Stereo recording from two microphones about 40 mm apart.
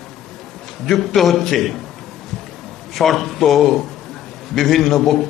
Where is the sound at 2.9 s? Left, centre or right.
Centre.